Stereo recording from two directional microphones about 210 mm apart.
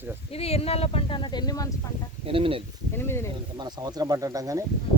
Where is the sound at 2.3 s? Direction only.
25° right (ahead or behind).